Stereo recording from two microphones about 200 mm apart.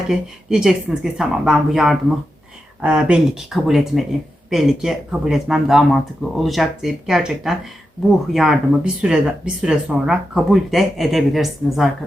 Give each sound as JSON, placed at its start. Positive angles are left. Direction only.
{"t": 0.1, "sound": "speech", "side_deg": 0}